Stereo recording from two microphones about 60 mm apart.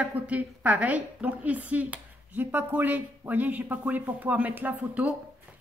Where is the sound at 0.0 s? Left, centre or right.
Right.